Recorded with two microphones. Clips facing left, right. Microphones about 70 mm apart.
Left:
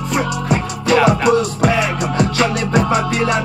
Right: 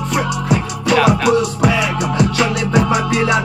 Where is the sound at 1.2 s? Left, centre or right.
Left.